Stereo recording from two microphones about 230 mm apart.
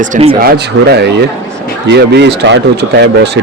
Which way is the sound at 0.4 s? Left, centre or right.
Right.